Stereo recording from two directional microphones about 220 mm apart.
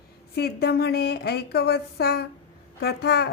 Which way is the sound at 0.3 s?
45° left (ahead or behind).